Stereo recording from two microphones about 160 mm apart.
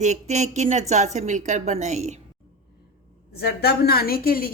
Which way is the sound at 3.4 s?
80° left.